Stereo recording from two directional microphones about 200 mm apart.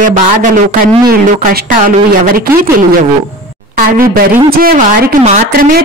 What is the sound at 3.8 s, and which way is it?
A woman's voice, 45° right (ahead or behind).